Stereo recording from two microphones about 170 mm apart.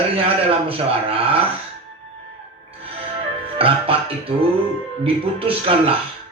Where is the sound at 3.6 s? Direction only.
35° right (ahead or behind).